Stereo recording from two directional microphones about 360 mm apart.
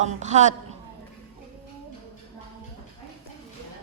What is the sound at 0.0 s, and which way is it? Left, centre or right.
Speech, centre.